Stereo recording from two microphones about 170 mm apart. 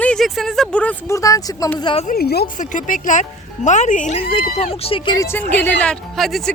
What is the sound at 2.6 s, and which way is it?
Speech, 50° left (ahead or behind).